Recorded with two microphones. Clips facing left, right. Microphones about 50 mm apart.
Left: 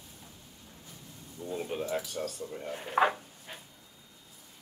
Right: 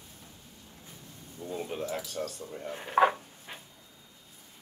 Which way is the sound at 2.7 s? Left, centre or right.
Right.